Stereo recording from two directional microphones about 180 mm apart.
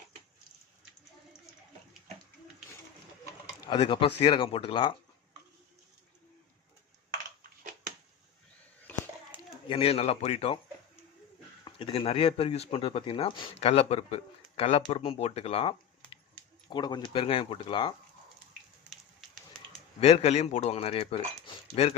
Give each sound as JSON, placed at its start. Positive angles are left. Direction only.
{"t": 3.2, "sound": "speech", "side_deg": 25}
{"t": 9.3, "sound": "a sound", "side_deg": -10}
{"t": 9.6, "sound": "speech", "side_deg": 30}
{"t": 11.6, "sound": "speech", "side_deg": 30}
{"t": 20.0, "sound": "speech", "side_deg": 35}